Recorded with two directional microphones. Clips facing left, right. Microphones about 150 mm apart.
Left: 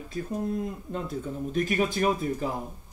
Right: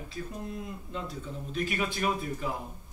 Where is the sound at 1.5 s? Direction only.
40° left (ahead or behind).